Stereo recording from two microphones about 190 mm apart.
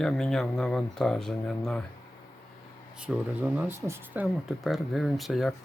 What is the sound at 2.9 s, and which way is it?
Speech, 5° right (ahead or behind).